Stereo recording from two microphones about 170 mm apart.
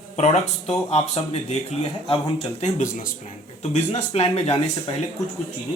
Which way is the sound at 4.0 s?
40° left (ahead or behind).